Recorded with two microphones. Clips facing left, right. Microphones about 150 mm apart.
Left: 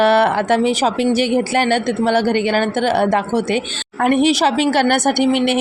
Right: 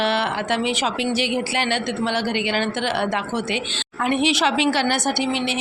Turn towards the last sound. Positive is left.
turn(degrees=55)  # may be behind; listen again after turning